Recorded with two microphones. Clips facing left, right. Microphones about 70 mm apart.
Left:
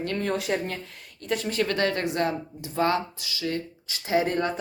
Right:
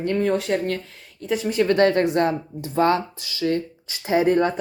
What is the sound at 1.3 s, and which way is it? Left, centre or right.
Speech, centre.